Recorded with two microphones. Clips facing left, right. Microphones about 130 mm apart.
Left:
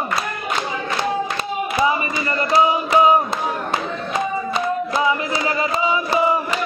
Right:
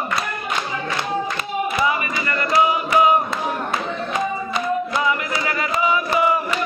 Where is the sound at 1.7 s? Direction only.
25° left (ahead or behind).